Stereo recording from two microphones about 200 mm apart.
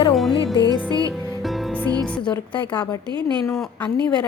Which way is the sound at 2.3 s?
5° left (ahead or behind).